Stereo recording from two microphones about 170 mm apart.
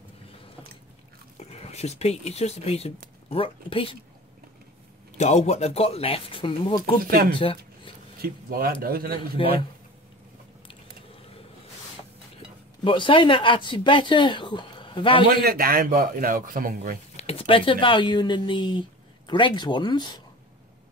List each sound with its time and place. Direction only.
1.4 s speech: 40° left (ahead or behind)
5.1 s speech: 40° left (ahead or behind)
7.0 s a man's voice: 60° right (ahead or behind)
7.3 s a sound: 30° left (ahead or behind)
8.2 s a man's voice: 65° right (ahead or behind)
9.4 s speech: 30° left (ahead or behind)
12.8 s speech: 30° left (ahead or behind)
15.4 s a man's voice: 60° right (ahead or behind)
17.2 s speech: 35° left (ahead or behind)